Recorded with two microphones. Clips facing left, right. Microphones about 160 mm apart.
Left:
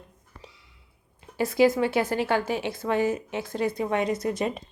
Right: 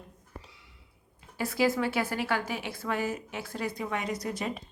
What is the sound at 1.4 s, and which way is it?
A woman's voice, 20° left (ahead or behind).